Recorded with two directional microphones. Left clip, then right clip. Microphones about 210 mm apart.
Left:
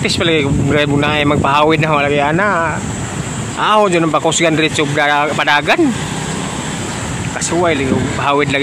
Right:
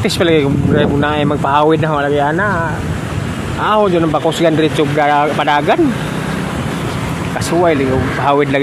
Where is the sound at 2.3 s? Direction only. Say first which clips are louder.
Left 2 dB; 25° left (ahead or behind).